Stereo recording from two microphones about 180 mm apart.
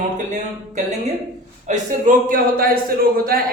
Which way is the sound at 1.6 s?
45° right (ahead or behind).